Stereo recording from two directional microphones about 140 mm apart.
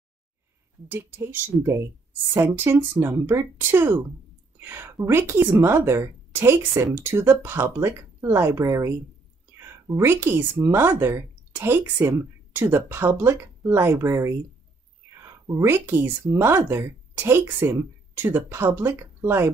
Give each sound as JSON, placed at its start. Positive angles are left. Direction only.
{"t": 0.8, "sound": "a woman's voice", "side_deg": -15}